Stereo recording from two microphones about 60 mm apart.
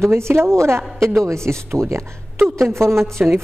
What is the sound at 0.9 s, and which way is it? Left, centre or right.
Speech, centre.